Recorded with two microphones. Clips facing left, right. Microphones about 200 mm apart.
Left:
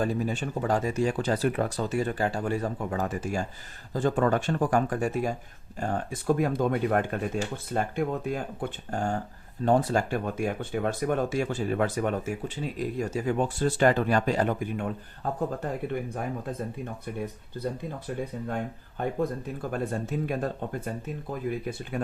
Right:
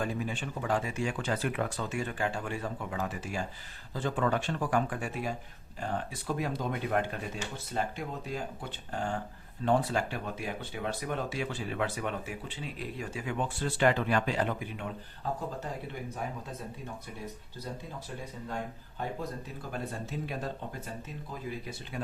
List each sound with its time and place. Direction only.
0.0 s speech: 40° left (ahead or behind)
18.4 s speech: 55° left (ahead or behind)
21.9 s speech: 55° left (ahead or behind)